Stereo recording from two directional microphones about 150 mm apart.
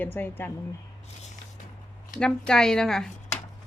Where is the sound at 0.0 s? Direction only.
15° left (ahead or behind).